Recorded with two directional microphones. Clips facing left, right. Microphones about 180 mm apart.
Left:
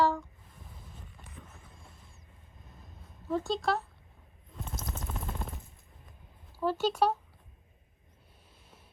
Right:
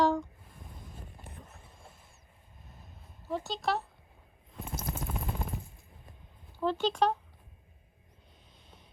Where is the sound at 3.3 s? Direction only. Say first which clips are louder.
Left 3 dB; 20° right (ahead or behind).